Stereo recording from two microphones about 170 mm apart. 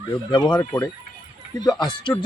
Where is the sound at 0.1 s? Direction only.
30° left (ahead or behind).